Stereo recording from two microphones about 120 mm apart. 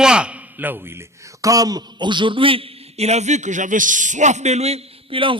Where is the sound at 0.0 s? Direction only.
5° right (ahead or behind).